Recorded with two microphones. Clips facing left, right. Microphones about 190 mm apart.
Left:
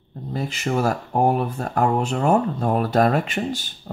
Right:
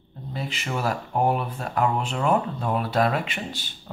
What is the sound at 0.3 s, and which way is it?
Speech, 45° left (ahead or behind).